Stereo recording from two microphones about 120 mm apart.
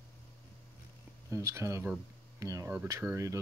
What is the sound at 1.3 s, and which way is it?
Speech, 25° right (ahead or behind).